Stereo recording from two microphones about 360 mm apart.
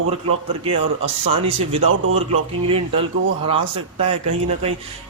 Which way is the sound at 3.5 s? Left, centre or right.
Centre.